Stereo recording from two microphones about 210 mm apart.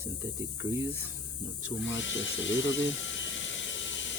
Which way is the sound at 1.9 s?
60° left (ahead or behind).